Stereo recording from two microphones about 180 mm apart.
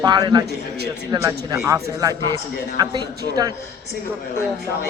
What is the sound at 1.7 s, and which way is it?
A man's voice, 15° right (ahead or behind).